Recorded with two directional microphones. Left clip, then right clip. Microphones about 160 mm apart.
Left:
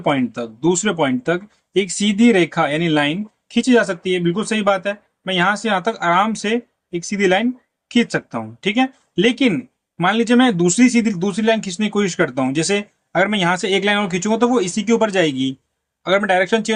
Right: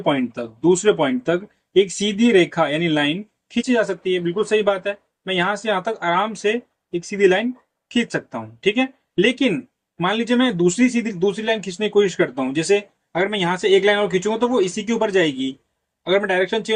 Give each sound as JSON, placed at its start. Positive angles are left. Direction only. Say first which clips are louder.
{"t": 0.0, "sound": "a man's voice", "louder": "left 2 dB", "side_deg": 40}